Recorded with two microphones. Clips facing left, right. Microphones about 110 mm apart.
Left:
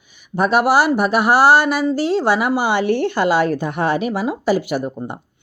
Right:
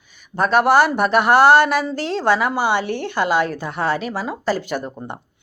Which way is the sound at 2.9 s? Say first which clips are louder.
Left 3 dB; 45° left (ahead or behind).